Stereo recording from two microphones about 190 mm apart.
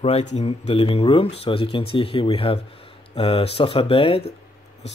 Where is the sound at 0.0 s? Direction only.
35° left (ahead or behind).